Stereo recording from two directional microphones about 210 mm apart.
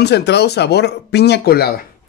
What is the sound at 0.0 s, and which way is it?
Speech, 50° left (ahead or behind).